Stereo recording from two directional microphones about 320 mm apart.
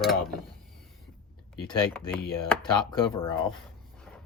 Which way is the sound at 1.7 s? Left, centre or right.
Centre.